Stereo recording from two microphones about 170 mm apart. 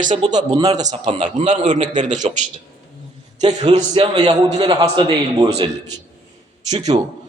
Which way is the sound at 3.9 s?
25° right (ahead or behind).